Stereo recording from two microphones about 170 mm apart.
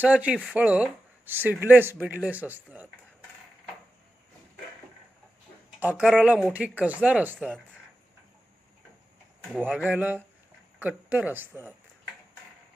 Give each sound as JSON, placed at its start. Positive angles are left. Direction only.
{"t": 0.0, "sound": "speech", "side_deg": -10}
{"t": 5.8, "sound": "speech", "side_deg": -10}
{"t": 7.3, "sound": "speech", "side_deg": 5}
{"t": 9.6, "sound": "speech", "side_deg": -5}